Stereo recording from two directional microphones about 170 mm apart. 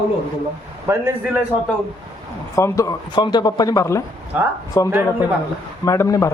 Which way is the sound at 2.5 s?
20° left (ahead or behind).